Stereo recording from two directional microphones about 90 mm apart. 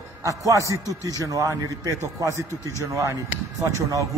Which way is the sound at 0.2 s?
35° right (ahead or behind).